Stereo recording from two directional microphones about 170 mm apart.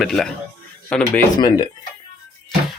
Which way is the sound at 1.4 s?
25° left (ahead or behind).